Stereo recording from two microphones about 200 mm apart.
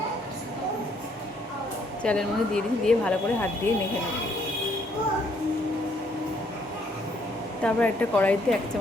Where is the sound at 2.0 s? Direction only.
5° left (ahead or behind).